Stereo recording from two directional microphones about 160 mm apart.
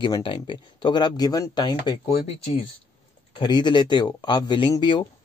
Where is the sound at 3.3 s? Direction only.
30° left (ahead or behind).